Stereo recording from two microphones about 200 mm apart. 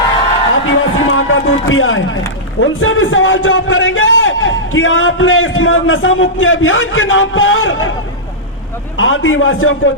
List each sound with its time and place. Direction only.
0.7 s music: 80° left
2.6 s a man's voice: 85° left
9.0 s a man's voice: 80° left